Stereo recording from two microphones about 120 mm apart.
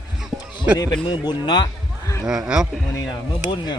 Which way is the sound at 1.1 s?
35° left (ahead or behind).